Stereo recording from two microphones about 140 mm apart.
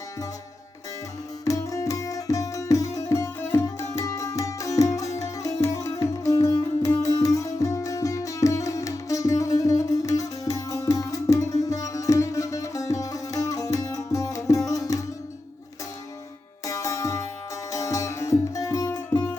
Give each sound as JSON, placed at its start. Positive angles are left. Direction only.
{"t": 1.5, "sound": "music", "side_deg": 25}
{"t": 16.6, "sound": "sitar", "side_deg": 25}
{"t": 17.7, "sound": "music", "side_deg": 25}